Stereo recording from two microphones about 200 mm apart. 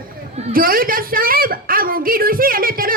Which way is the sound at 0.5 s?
45° right (ahead or behind).